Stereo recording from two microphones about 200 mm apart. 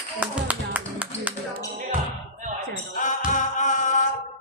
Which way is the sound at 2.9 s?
40° left (ahead or behind).